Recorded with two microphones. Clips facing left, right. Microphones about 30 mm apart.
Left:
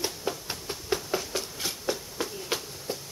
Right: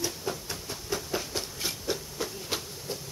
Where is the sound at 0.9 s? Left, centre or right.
Centre.